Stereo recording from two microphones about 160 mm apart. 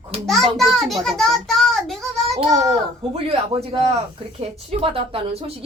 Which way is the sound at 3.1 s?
35° right (ahead or behind).